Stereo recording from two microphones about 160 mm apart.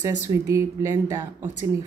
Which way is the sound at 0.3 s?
20° right (ahead or behind).